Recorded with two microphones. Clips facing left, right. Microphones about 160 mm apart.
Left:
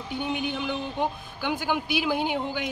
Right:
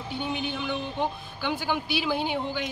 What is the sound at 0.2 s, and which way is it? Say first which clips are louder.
A man's voice: left 2 dB; 10° left (ahead or behind).